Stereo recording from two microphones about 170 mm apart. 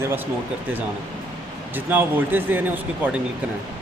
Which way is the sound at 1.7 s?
10° right (ahead or behind).